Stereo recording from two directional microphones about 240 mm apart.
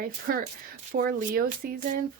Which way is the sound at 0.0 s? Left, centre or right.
Right.